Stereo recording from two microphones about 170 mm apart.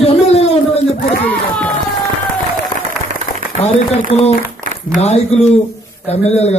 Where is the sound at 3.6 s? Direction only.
40° left (ahead or behind).